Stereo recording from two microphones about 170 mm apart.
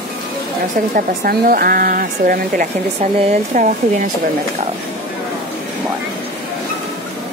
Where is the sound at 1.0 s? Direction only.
60° right (ahead or behind).